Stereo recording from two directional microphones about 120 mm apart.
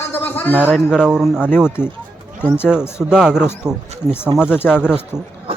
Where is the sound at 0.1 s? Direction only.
15° left (ahead or behind).